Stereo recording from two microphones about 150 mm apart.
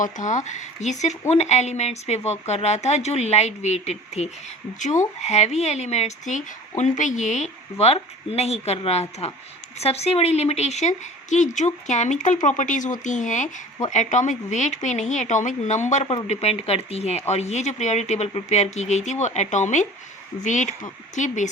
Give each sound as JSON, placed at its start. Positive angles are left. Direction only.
{"t": 0.0, "sound": "speech", "side_deg": 55}